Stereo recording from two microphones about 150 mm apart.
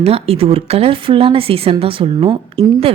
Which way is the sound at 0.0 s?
40° right (ahead or behind).